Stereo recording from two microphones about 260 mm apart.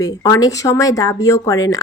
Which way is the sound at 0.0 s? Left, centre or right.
Centre.